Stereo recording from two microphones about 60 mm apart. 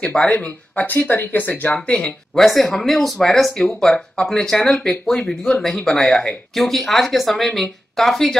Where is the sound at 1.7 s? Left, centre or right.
Centre.